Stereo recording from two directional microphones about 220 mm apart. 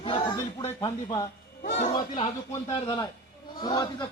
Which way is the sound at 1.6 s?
35° left (ahead or behind).